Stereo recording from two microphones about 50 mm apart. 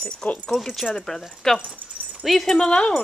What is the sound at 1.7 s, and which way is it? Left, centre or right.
Dog, centre.